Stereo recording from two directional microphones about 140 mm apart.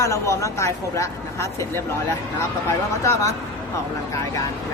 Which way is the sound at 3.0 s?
20° left (ahead or behind).